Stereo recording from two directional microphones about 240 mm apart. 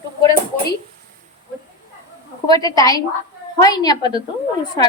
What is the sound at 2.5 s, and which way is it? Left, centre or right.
A woman's voice, centre.